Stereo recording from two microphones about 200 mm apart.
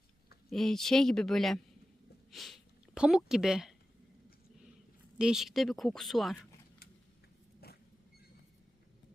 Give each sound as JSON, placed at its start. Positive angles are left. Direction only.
{"t": 0.5, "sound": "speech", "side_deg": 0}
{"t": 5.1, "sound": "speech", "side_deg": -5}
{"t": 7.6, "sound": "vehicle", "side_deg": 50}